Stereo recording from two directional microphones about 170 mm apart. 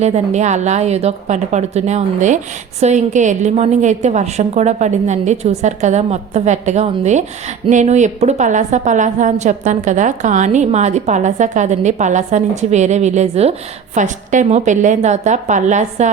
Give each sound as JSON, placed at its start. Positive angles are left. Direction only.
{"t": 0.0, "sound": "a woman's voice", "side_deg": -40}